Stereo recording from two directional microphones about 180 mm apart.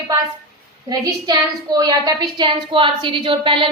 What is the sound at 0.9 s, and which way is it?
A woman's voice, 20° right (ahead or behind).